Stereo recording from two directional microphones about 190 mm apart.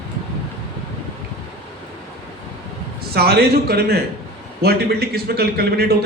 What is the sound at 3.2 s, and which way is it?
A man's voice, 55° right (ahead or behind).